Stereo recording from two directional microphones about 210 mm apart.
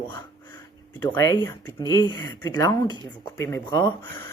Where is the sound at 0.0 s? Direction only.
15° left (ahead or behind).